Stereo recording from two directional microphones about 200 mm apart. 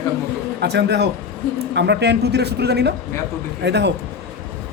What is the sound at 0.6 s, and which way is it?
Speech, 55° right (ahead or behind).